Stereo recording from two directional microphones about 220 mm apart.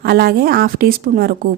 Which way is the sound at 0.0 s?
45° right (ahead or behind).